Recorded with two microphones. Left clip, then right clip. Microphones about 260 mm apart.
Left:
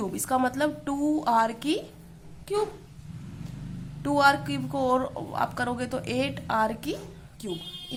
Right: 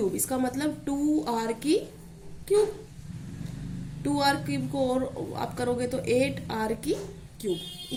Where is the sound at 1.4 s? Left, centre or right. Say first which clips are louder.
Right 1 dB; left.